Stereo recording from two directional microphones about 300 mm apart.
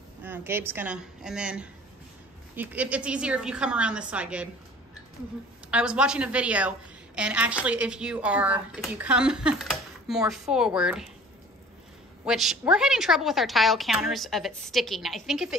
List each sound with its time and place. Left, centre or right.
0.2 s speech: centre
5.7 s speech: centre
12.3 s speech: centre